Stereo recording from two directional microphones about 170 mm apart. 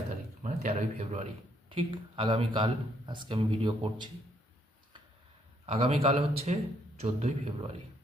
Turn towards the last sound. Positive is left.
turn(degrees=-40)  # may be behind; listen again after turning